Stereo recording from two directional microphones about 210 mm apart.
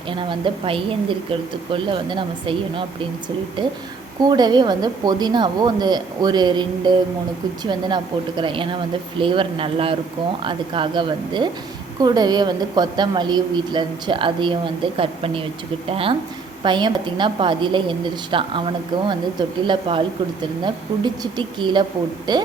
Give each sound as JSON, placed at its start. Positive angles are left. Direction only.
{"t": 0.1, "sound": "a woman's voice", "side_deg": -25}